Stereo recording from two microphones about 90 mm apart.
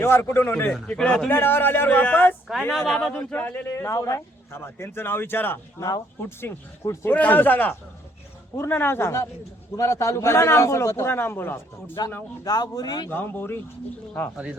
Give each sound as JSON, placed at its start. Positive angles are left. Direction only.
{"t": 0.0, "sound": "speech", "side_deg": 25}
{"t": 0.9, "sound": "a man's voice", "side_deg": 10}
{"t": 1.3, "sound": "speech", "side_deg": 25}
{"t": 2.7, "sound": "speech", "side_deg": 5}
{"t": 3.2, "sound": "speech", "side_deg": 20}
{"t": 3.7, "sound": "a man's voice", "side_deg": 35}
{"t": 12.5, "sound": "speech", "side_deg": 45}
{"t": 13.1, "sound": "speech", "side_deg": 20}